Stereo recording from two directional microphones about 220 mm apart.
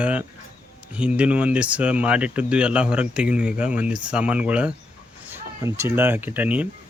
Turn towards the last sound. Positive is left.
turn(degrees=-5)  # may be behind; listen again after turning